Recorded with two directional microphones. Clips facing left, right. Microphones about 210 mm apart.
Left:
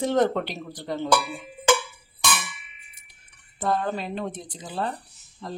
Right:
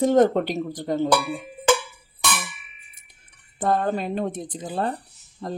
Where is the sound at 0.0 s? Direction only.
45° right (ahead or behind).